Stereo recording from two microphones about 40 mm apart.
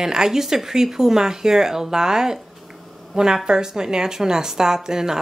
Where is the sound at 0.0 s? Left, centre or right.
Centre.